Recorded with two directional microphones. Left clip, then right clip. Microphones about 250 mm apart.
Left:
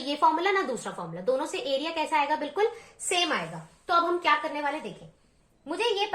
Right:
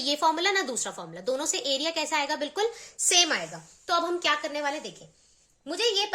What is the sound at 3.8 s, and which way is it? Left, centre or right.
Speech, right.